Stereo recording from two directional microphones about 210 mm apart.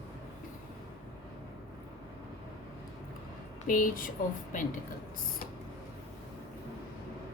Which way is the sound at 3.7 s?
40° left (ahead or behind).